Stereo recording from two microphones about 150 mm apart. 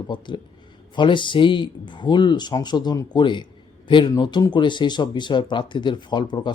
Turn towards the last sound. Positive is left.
turn(degrees=30)  # may be behind; listen again after turning